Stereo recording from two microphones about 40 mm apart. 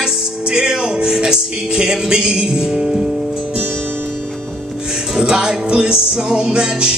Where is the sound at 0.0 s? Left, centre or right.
Centre.